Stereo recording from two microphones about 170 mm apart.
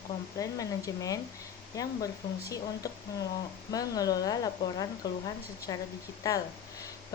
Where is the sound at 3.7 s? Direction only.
20° left (ahead or behind).